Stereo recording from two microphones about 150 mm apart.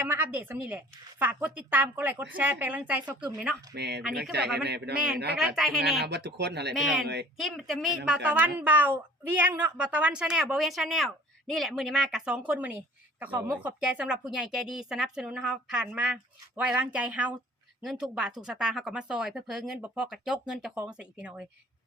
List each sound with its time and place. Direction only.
0.1 s a woman's voice: 15° right (ahead or behind)
3.8 s a man's voice: 90° right
5.5 s a woman's voice: centre (ahead or behind)
6.1 s a man's voice: 90° right
6.7 s a woman's voice: centre (ahead or behind)